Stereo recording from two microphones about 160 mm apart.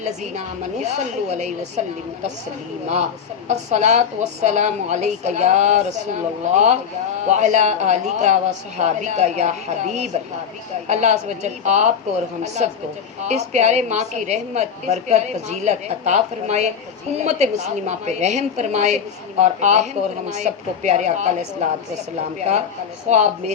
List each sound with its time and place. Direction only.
0.0 s a woman's voice: 45° right (ahead or behind)
2.8 s a woman's voice: 45° right (ahead or behind)
23.0 s a woman's voice: 45° right (ahead or behind)